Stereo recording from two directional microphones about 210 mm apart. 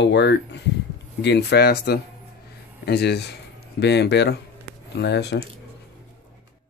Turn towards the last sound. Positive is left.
turn(degrees=55)  # may be behind; listen again after turning